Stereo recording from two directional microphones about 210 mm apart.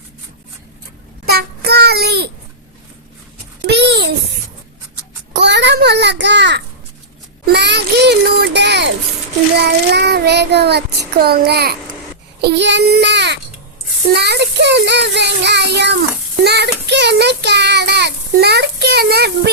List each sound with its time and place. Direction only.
1.2 s child singing: 50° right (ahead or behind)
3.7 s a sound: 55° right (ahead or behind)
5.3 s a sound: 55° right (ahead or behind)
7.4 s child singing: 55° right (ahead or behind)
12.4 s a child's voice: 55° right (ahead or behind)
14.2 s child singing: 50° right (ahead or behind)